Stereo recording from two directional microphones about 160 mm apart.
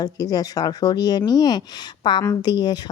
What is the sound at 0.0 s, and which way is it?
Speech, 25° left (ahead or behind).